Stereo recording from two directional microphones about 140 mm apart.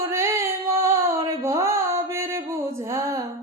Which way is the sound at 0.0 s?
20° right (ahead or behind).